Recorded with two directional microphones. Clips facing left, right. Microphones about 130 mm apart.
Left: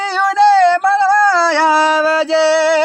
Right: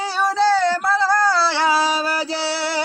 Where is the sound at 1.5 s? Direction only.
60° left (ahead or behind).